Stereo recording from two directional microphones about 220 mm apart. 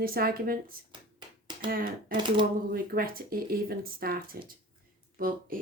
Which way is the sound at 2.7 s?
40° right (ahead or behind).